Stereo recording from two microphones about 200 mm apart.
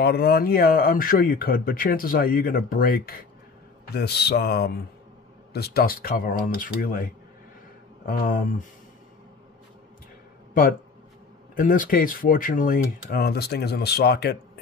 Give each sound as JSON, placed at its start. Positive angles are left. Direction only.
{"t": 0.0, "sound": "speech", "side_deg": 50}
{"t": 10.5, "sound": "speech", "side_deg": 45}